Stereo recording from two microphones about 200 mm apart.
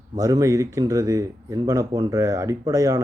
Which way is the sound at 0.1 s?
20° right (ahead or behind).